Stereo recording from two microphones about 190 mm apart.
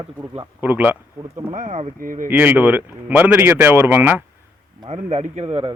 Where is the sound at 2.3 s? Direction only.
10° right (ahead or behind).